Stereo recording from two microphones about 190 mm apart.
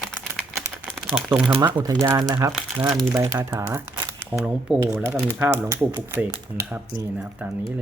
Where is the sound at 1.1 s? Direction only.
10° right (ahead or behind).